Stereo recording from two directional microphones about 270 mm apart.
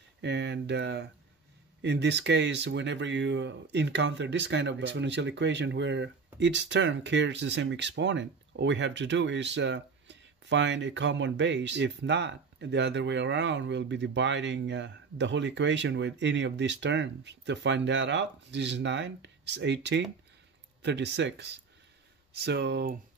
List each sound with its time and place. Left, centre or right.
0.2 s speech: right